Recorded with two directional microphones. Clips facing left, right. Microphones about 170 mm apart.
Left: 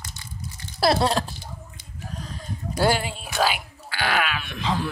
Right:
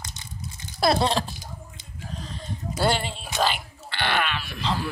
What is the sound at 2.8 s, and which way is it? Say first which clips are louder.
Music: left 2 dB; 5° left (ahead or behind).